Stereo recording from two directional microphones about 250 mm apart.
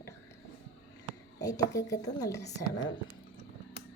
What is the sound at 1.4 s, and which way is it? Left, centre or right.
A woman's voice, centre.